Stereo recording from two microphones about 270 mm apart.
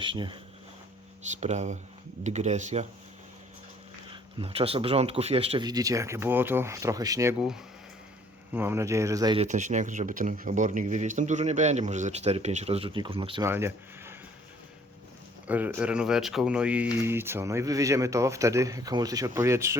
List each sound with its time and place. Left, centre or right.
0.0 s speech: centre
1.4 s speech: right
4.1 s speech: centre
15.4 s speech: centre